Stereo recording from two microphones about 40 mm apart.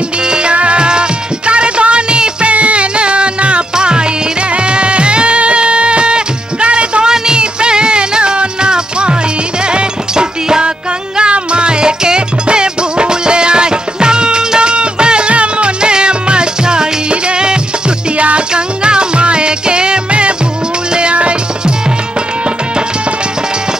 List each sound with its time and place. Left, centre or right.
0.3 s music: right